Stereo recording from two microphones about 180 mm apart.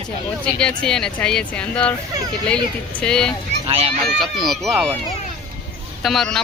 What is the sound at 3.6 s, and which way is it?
Speech, 35° right (ahead or behind).